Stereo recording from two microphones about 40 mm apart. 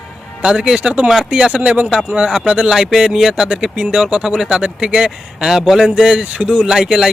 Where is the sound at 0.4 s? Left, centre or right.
Right.